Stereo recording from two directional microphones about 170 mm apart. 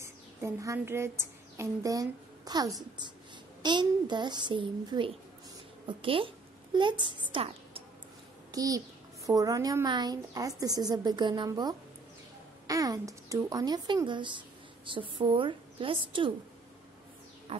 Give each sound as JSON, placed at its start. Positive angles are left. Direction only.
{"t": 0.0, "sound": "a woman's voice", "side_deg": -15}
{"t": 17.5, "sound": "music", "side_deg": -35}